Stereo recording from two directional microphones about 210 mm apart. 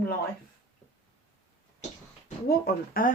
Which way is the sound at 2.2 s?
45° left (ahead or behind).